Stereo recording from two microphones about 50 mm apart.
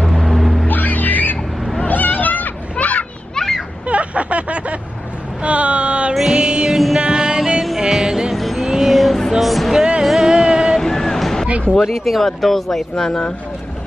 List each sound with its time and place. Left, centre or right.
0.1 s vehicle: centre
0.7 s music: left
1.9 s children playing: left
3.3 s children playing: centre
3.8 s a sound: right
5.4 s vehicle: right
6.3 s music: centre
7.0 s music: centre
8.4 s a sound: centre
9.3 s music: centre
10.8 s a sound: centre
11.8 s speech: centre